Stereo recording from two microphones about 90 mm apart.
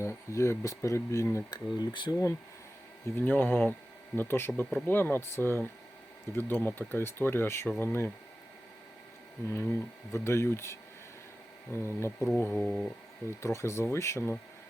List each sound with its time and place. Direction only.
0.0 s speech: 30° left (ahead or behind)
1.5 s speech: 50° left (ahead or behind)
3.2 s speech: 25° left (ahead or behind)
9.5 s speech: 25° left (ahead or behind)
13.4 s speech: 35° left (ahead or behind)